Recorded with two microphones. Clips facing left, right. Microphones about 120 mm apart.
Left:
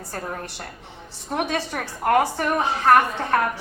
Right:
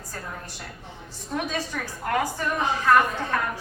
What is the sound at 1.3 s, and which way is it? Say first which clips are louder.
Speech: left 4 dB; 65° left (ahead or behind).